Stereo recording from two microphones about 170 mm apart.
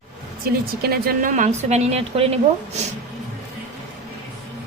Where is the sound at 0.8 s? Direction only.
60° right (ahead or behind); by 2.8 s 40° right (ahead or behind).